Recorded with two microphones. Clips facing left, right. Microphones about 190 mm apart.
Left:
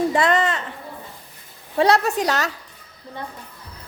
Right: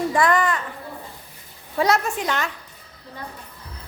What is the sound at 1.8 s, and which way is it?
Speech, 35° left (ahead or behind).